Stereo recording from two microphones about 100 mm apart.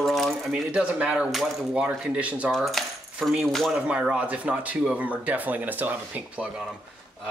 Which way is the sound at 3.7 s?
10° right (ahead or behind).